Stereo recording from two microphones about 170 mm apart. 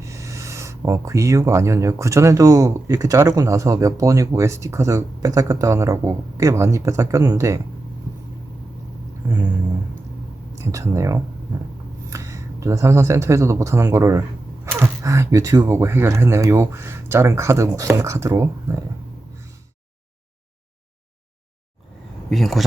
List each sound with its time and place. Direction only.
0.0 s speech: 20° right (ahead or behind)
9.3 s a sound: 25° right (ahead or behind)
10.6 s speech: 20° right (ahead or behind)
22.3 s speech: centre (ahead or behind)